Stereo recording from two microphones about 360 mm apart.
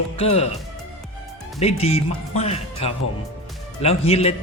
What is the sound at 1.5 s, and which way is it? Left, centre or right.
Speech, centre.